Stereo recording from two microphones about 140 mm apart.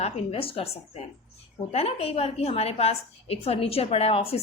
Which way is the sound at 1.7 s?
45° left (ahead or behind).